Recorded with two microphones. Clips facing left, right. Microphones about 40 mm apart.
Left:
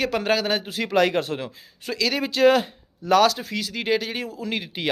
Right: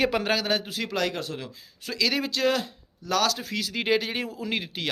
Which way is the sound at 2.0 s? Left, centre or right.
Centre.